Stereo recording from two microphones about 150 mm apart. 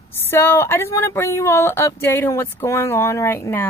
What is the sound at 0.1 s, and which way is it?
Speech, 15° left (ahead or behind).